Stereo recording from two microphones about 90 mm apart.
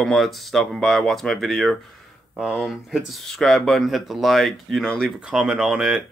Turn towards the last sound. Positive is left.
turn(degrees=-5)  # may be behind; listen again after turning